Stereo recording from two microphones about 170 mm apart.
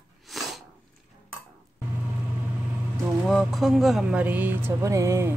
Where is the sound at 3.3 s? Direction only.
Centre (ahead or behind); by 5.3 s 15° right (ahead or behind).